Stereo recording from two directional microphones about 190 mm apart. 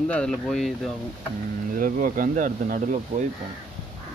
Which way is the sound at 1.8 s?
45° right (ahead or behind).